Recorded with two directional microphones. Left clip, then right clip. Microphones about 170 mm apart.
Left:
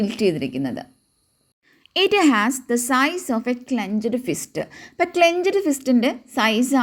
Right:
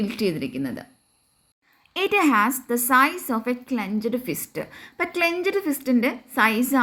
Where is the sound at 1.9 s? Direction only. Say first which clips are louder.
Left 3 dB; 25° left (ahead or behind).